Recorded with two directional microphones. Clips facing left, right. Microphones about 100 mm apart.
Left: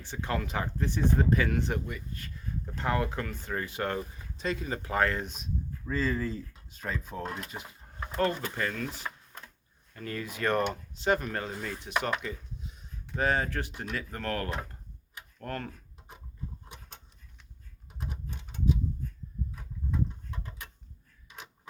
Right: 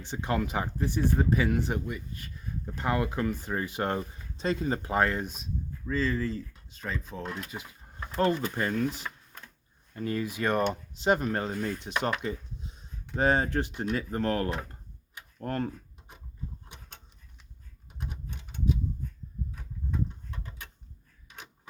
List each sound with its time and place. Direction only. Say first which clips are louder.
0.0 s speech: right 3 dB; 20° right (ahead or behind)
5.2 s speech: right 1 dB; centre (ahead or behind)
8.1 s speech: right 3 dB; 20° right (ahead or behind)
9.9 s speech: right 6 dB; 20° right (ahead or behind)
12.2 s a sound: right 4 dB; 30° right (ahead or behind)
13.1 s speech: right 3 dB; 30° right (ahead or behind)